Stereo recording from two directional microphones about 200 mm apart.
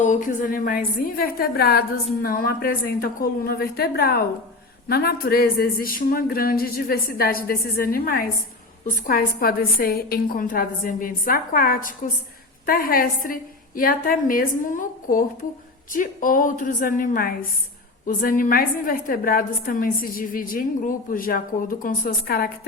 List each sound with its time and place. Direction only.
0.0 s a woman's voice: 40° left (ahead or behind)